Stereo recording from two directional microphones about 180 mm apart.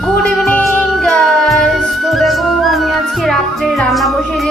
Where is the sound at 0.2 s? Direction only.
5° left (ahead or behind).